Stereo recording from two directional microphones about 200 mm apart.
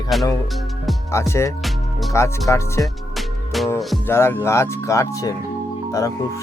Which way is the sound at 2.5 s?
15° left (ahead or behind).